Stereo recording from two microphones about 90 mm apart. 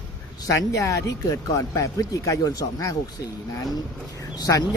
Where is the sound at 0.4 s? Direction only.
40° left (ahead or behind).